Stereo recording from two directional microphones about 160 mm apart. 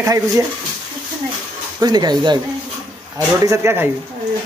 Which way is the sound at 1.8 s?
25° right (ahead or behind).